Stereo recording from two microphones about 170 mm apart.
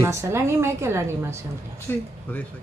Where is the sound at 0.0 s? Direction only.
15° right (ahead or behind).